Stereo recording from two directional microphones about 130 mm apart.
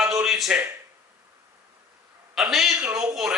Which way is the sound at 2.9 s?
25° right (ahead or behind).